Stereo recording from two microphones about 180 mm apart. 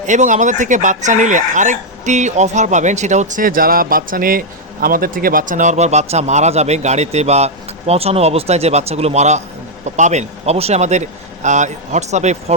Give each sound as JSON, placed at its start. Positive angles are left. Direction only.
{"t": 0.1, "sound": "speech", "side_deg": -40}